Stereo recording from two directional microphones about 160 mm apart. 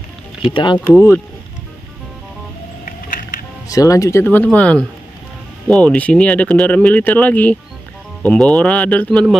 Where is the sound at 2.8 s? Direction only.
55° left (ahead or behind).